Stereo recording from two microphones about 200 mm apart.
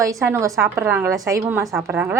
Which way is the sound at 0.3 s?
15° right (ahead or behind).